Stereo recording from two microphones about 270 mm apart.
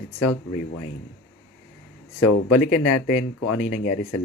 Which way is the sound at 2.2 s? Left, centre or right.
Left.